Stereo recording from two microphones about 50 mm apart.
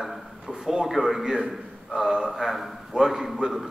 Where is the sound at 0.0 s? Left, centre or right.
Centre.